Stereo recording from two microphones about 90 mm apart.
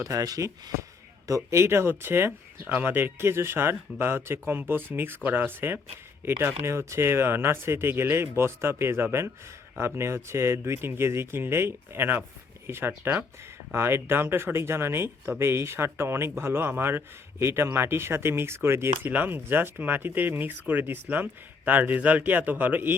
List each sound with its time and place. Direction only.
0.0 s speech: 40° right (ahead or behind)
1.5 s speech: 30° right (ahead or behind)